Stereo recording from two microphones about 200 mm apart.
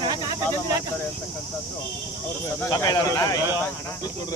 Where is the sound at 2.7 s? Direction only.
15° left (ahead or behind).